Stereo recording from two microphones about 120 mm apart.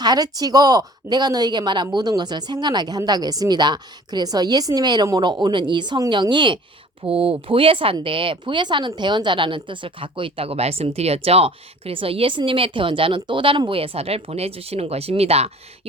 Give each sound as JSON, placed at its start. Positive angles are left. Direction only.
{"t": 0.0, "sound": "a woman's voice", "side_deg": -35}
{"t": 7.0, "sound": "a woman's voice", "side_deg": -50}